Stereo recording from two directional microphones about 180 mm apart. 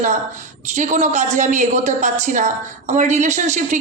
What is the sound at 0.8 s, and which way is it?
A woman's voice, 40° right (ahead or behind).